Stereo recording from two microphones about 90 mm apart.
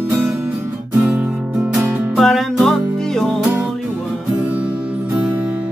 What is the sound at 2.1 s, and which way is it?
Music, centre (ahead or behind).